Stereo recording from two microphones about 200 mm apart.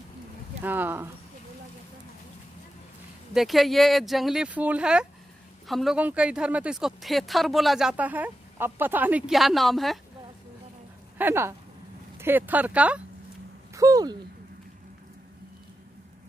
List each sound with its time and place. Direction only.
0.7 s speech: 10° right (ahead or behind)
3.3 s speech: centre (ahead or behind)
11.1 s speech: 10° right (ahead or behind)
13.7 s speech: 15° right (ahead or behind)